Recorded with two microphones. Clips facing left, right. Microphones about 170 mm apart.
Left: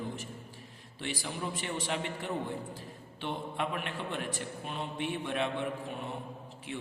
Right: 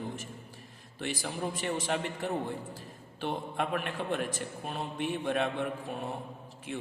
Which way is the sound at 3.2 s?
45° right (ahead or behind).